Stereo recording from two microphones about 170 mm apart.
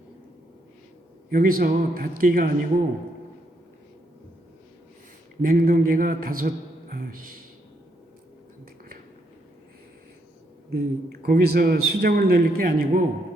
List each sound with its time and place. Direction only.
1.3 s a man's voice: 55° right (ahead or behind)
5.4 s a man's voice: 55° right (ahead or behind)
10.7 s a man's voice: 65° right (ahead or behind)